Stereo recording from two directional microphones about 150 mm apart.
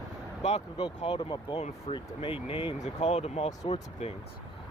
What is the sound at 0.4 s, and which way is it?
Speech, 45° left (ahead or behind).